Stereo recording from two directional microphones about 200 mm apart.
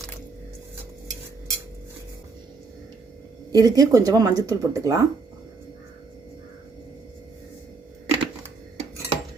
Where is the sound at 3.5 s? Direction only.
20° right (ahead or behind).